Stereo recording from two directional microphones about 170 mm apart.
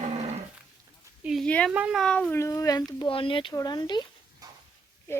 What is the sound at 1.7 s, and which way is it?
Speech, 5° right (ahead or behind).